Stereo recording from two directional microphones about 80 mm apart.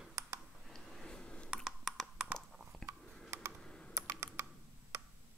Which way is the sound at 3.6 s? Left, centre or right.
Centre.